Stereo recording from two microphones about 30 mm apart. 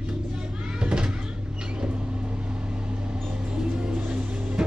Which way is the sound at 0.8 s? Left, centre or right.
Right.